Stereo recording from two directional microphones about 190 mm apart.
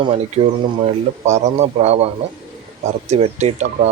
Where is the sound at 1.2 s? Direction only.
35° right (ahead or behind).